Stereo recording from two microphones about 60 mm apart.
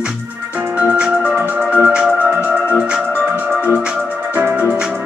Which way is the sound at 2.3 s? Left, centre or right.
Right.